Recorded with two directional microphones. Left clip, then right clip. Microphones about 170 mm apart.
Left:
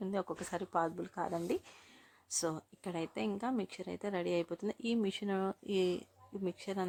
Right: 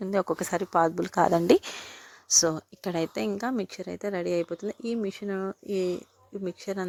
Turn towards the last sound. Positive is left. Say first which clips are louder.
# right 6 dB
turn(degrees=-25)  # may be behind; listen again after turning